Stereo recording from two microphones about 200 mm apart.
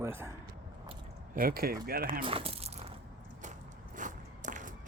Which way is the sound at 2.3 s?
30° right (ahead or behind).